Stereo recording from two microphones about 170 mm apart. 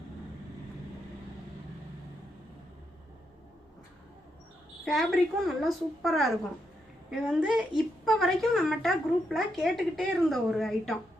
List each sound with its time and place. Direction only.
4.9 s a woman's voice: centre (ahead or behind)